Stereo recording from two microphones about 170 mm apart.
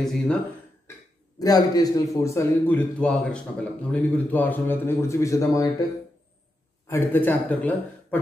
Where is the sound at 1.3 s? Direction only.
20° left (ahead or behind).